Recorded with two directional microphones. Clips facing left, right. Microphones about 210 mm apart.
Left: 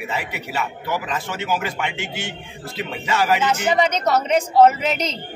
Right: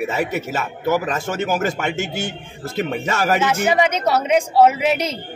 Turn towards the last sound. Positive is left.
turn(degrees=-10)  # may be behind; listen again after turning